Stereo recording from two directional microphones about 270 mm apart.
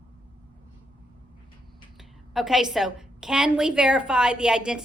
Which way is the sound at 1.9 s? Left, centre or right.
Centre.